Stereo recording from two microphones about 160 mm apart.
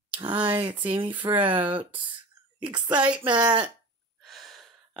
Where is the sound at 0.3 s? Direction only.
10° right (ahead or behind).